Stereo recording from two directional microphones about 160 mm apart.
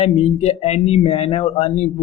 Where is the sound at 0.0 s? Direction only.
40° left (ahead or behind).